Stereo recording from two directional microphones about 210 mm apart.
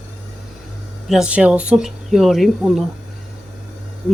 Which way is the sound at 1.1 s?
5° right (ahead or behind).